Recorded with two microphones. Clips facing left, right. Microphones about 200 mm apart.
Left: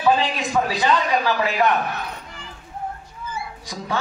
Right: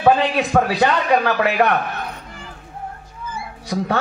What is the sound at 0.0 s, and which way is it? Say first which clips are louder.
A woman's voice: right 4 dB; 60° right (ahead or behind).